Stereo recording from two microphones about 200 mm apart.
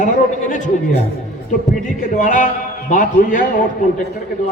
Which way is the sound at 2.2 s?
40° left (ahead or behind).